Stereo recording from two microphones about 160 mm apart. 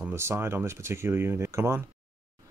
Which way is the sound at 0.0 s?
15° right (ahead or behind).